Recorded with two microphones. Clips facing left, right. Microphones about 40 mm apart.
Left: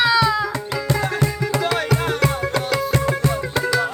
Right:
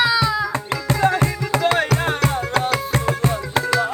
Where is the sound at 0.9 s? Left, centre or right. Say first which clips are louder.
Right 4 dB; right.